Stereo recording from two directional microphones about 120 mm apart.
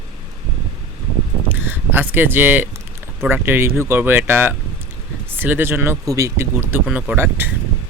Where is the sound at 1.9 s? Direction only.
15° right (ahead or behind).